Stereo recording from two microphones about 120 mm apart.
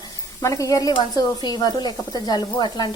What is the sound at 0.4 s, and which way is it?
Speech, 30° left (ahead or behind).